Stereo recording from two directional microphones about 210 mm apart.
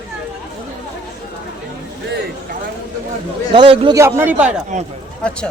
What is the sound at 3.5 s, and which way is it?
Speech, 25° right (ahead or behind).